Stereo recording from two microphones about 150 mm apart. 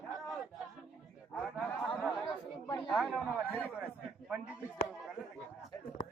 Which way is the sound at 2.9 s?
Centre (ahead or behind).